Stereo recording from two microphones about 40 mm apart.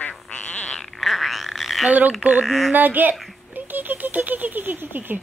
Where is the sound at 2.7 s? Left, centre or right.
Right.